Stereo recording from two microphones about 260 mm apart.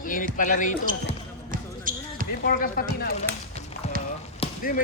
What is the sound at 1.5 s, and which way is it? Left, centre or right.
Basketball bounce, right.